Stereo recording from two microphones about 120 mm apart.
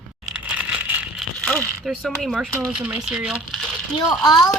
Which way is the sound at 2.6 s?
10° right (ahead or behind).